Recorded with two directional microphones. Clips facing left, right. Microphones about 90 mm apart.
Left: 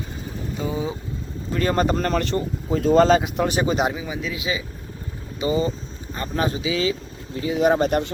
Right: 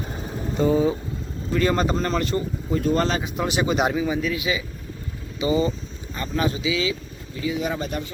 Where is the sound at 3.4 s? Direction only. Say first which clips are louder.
Left 1 dB; 35° left (ahead or behind).